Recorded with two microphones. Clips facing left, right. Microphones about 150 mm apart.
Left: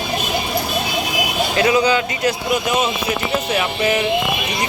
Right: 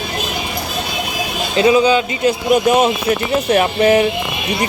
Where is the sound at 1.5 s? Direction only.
20° right (ahead or behind).